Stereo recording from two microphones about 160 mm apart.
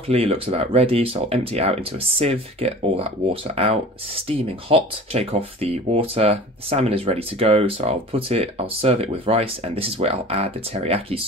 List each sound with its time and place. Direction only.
0.1 s speech: 40° right (ahead or behind)